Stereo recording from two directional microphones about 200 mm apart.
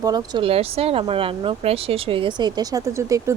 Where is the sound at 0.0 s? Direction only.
20° right (ahead or behind).